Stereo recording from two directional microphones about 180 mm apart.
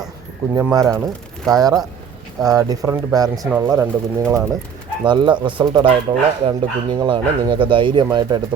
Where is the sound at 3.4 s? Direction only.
10° right (ahead or behind).